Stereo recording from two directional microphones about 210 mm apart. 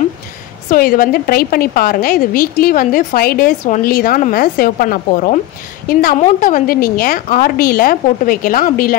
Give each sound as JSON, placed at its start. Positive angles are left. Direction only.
{"t": 0.7, "sound": "a woman's voice", "side_deg": 45}